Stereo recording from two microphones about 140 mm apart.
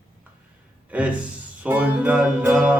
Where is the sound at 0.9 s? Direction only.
10° right (ahead or behind).